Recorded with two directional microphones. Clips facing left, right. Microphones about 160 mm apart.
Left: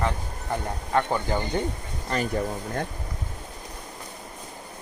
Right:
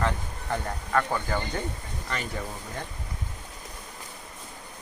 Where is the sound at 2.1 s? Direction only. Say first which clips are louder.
Left 7 dB; 40° left (ahead or behind).